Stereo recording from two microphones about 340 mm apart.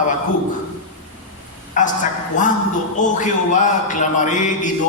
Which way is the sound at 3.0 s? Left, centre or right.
Left.